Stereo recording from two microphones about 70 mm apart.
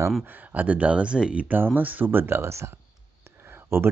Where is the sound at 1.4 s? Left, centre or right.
Right.